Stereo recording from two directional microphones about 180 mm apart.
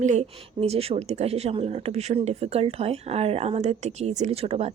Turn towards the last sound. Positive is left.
turn(degrees=-35)  # may be behind; listen again after turning